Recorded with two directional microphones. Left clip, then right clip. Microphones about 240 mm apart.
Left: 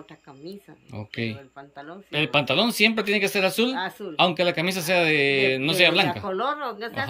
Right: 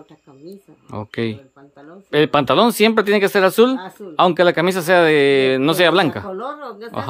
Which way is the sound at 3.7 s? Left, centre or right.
Centre.